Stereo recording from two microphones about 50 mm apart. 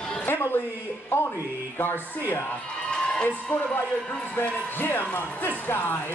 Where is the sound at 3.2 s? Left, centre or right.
Left.